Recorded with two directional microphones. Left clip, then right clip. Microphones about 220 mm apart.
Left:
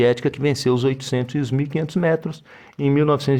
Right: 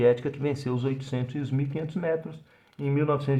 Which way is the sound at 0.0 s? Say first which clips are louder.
Left 5 dB; 35° left (ahead or behind).